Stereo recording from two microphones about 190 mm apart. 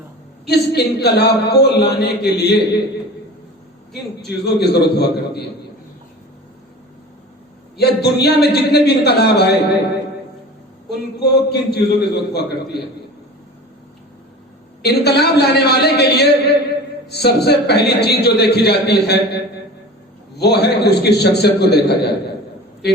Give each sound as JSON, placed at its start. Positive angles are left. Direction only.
{"t": 0.4, "sound": "a man's voice", "side_deg": 60}
{"t": 4.4, "sound": "a man's voice", "side_deg": 60}
{"t": 7.8, "sound": "a man's voice", "side_deg": 60}
{"t": 11.2, "sound": "a man's voice", "side_deg": 60}
{"t": 14.8, "sound": "a man's voice", "side_deg": 60}
{"t": 20.4, "sound": "a man's voice", "side_deg": 60}